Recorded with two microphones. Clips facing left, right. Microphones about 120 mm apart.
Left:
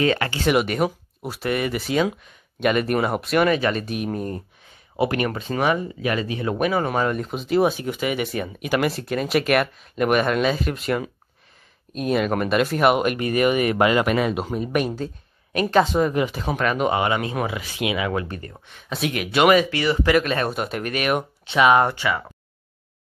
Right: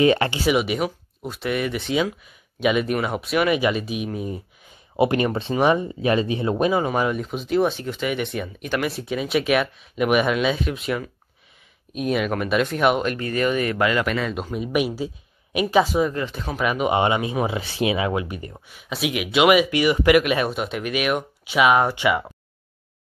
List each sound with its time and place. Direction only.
0.0 s speech: 20° right (ahead or behind)
0.4 s speech: 5° right (ahead or behind)
4.9 s speech: 20° right (ahead or behind)
6.8 s speech: 5° right (ahead or behind); by 14.3 s 15° left (ahead or behind)
14.5 s speech: 5° right (ahead or behind)
16.1 s speech: 15° left (ahead or behind)
16.5 s speech: 5° right (ahead or behind)
16.9 s speech: 20° right (ahead or behind)
17.5 s speech: 30° right (ahead or behind)
18.1 s speech: 15° right (ahead or behind)
21.9 s speech: 15° right (ahead or behind)